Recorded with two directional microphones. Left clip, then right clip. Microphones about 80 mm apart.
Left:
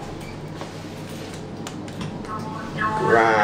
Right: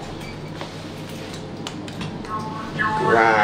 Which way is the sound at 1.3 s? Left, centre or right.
Centre.